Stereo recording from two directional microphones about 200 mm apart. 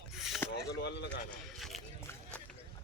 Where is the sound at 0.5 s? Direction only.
55° left (ahead or behind).